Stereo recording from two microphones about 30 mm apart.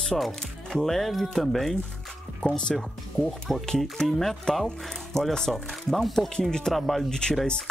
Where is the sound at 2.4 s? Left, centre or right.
Left.